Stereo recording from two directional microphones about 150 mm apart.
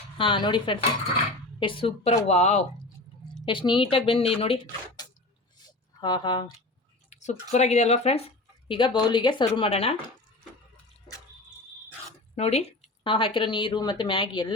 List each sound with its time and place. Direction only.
0.2 s a woman's voice: 35° left (ahead or behind); by 2.6 s 50° left (ahead or behind)
3.4 s a woman's voice: 35° left (ahead or behind)
5.6 s a sound: 30° left (ahead or behind)
7.1 s a sound: 50° left (ahead or behind)
7.5 s speech: 45° left (ahead or behind)
8.6 s a woman's voice: 35° left (ahead or behind)
9.5 s a woman's voice: 40° left (ahead or behind)
12.4 s speech: 45° left (ahead or behind)
13.1 s a woman's voice: 35° left (ahead or behind)